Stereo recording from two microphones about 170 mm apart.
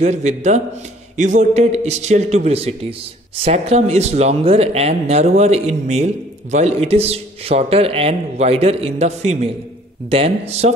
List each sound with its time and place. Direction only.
0.0 s a man's voice: 40° right (ahead or behind)